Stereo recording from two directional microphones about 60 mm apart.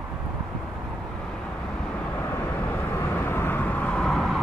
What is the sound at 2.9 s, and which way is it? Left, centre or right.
Vehicle, left.